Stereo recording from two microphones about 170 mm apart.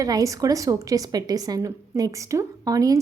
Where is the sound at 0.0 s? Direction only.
20° right (ahead or behind).